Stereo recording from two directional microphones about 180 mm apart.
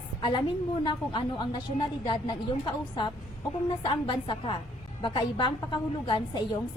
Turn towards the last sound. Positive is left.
turn(degrees=25)  # may be behind; listen again after turning